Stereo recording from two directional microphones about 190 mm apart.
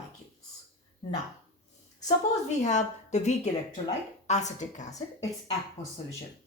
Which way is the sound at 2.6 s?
40° left (ahead or behind).